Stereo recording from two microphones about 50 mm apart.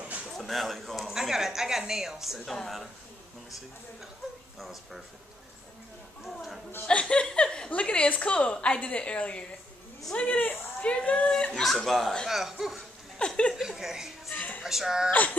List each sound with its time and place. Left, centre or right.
0.4 s a man's voice: centre
1.1 s a woman's voice: centre
4.6 s speech: centre
6.2 s speech: centre
6.9 s chuckle: left
8.1 s a woman's voice: left
11.5 s speech: centre
13.2 s a sound: left
13.6 s a woman's voice: centre
14.3 s music: left
14.6 s speech: centre